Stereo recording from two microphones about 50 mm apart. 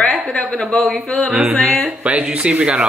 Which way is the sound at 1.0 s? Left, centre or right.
Left.